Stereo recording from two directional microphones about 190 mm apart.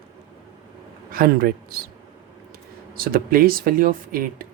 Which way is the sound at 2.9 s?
50° right (ahead or behind).